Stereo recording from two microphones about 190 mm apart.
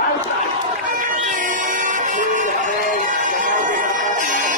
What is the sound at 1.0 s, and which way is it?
Vehicle, 45° right (ahead or behind).